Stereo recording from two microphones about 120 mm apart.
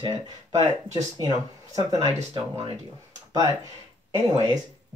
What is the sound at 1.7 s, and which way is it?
Speech, 30° right (ahead or behind).